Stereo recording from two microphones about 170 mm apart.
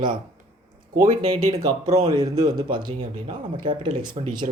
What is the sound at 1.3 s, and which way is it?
Speech, 40° right (ahead or behind).